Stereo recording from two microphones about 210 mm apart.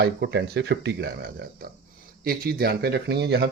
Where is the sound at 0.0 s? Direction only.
50° right (ahead or behind).